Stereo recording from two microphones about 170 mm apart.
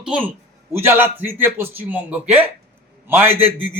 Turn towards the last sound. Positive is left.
turn(degrees=-10)  # may be behind; listen again after turning